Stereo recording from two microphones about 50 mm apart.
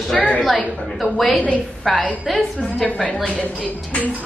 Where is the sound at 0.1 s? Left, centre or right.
Centre.